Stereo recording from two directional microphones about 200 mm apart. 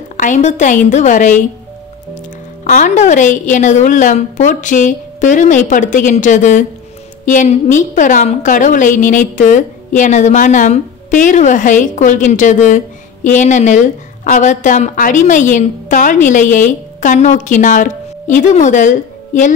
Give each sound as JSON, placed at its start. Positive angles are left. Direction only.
{"t": 0.2, "sound": "a woman's voice", "side_deg": 40}
{"t": 2.6, "sound": "a woman's voice", "side_deg": 40}